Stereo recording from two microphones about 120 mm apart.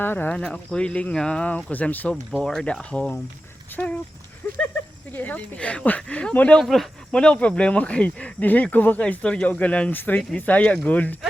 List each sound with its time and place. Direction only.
0.0 s speech: 15° left (ahead or behind)
5.1 s speech: 15° left (ahead or behind)